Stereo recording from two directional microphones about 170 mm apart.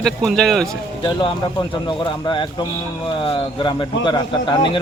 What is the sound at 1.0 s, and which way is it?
Speech, 25° left (ahead or behind).